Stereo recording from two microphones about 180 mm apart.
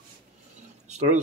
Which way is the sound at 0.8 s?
40° right (ahead or behind).